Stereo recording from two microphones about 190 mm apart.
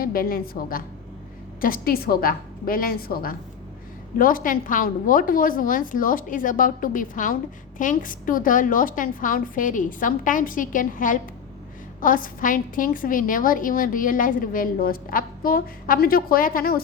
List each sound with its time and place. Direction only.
0.0 s a woman's voice: 50° left (ahead or behind)